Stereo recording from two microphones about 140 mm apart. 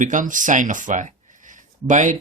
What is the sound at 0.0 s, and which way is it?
Speech, 65° right (ahead or behind).